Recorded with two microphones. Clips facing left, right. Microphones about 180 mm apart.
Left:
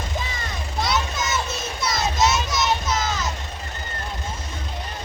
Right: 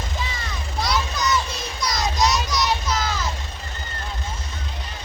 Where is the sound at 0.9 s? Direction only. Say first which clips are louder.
Right 2 dB; 25° left (ahead or behind).